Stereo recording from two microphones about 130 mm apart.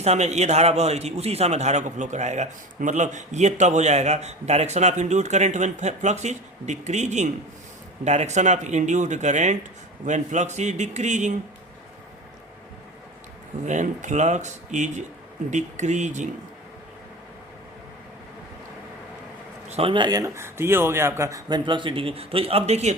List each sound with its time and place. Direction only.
0.0 s a man's voice: 60° right (ahead or behind)
13.7 s a man's voice: 70° right (ahead or behind)
19.6 s a sound: 55° right (ahead or behind)
19.9 s speech: 35° right (ahead or behind)
21.6 s speech: 40° right (ahead or behind); by 23.0 s 60° right (ahead or behind)